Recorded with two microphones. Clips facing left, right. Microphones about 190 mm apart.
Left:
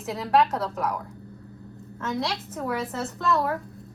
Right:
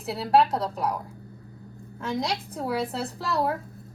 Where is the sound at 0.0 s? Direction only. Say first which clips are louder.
Right 1 dB; 35° right (ahead or behind).